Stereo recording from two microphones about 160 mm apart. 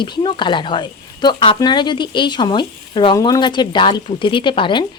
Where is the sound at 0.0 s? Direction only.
30° left (ahead or behind).